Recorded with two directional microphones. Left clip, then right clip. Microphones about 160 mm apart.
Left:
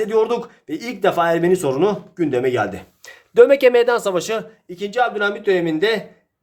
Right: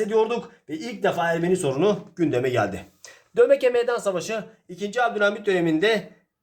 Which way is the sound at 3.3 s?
40° left (ahead or behind).